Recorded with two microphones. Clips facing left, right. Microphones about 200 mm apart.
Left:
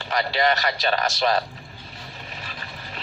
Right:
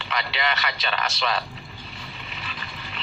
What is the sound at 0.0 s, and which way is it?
A man's voice, 40° left (ahead or behind).